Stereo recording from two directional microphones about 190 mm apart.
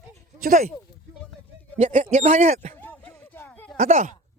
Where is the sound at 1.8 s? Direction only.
40° right (ahead or behind).